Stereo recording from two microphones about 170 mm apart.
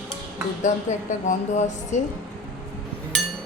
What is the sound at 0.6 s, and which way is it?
A woman's voice, 45° left (ahead or behind).